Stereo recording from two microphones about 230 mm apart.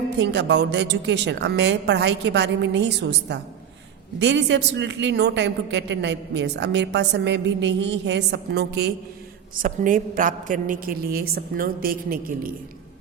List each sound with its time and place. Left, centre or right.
0.2 s a man's voice: right
9.6 s a woman's voice: right